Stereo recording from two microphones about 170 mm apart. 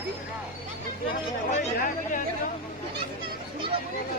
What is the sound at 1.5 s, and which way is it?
Speech, 50° left (ahead or behind).